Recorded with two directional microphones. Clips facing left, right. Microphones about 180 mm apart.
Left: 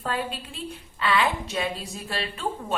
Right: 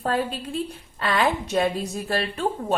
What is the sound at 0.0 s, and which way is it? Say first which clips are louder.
A woman's voice: right 5 dB; 45° right (ahead or behind).